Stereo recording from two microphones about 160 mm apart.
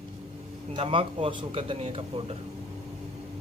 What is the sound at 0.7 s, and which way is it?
A man's voice, 35° right (ahead or behind).